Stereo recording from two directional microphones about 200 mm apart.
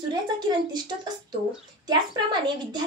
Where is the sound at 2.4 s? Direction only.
20° right (ahead or behind).